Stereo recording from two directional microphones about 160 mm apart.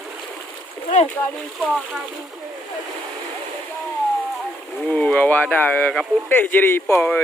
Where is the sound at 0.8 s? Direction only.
45° left (ahead or behind).